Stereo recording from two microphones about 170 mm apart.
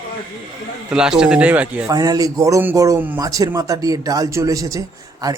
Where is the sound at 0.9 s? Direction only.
5° right (ahead or behind).